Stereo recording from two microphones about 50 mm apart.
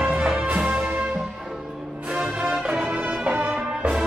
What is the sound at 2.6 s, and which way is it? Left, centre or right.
Music, centre.